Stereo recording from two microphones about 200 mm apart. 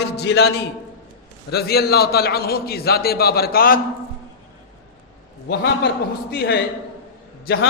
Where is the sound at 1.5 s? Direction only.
50° left (ahead or behind).